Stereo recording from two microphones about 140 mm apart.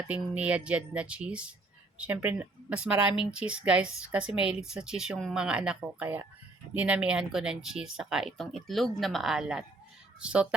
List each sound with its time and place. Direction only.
0.1 s a woman's voice: 10° right (ahead or behind)